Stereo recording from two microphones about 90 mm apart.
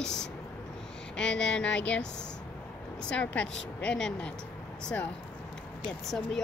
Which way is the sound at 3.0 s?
15° left (ahead or behind).